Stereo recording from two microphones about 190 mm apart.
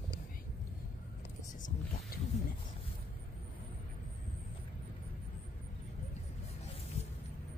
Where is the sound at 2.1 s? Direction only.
50° left (ahead or behind).